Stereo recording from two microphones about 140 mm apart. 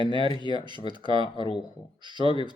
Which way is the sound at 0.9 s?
35° right (ahead or behind).